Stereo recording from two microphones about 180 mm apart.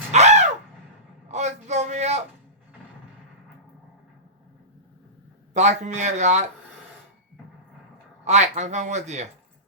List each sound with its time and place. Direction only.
0.1 s a sound: 40° right (ahead or behind)
5.5 s speech: 40° right (ahead or behind)
8.2 s speech: 40° right (ahead or behind)